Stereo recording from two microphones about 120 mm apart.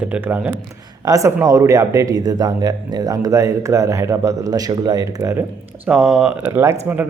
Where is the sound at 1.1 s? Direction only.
25° right (ahead or behind).